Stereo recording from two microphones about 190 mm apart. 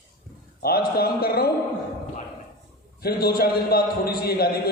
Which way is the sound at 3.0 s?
55° left (ahead or behind).